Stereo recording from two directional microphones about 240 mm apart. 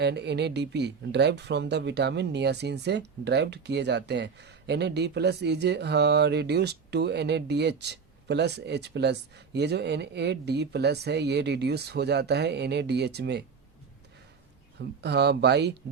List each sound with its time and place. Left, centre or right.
0.0 s speech: right
14.8 s speech: right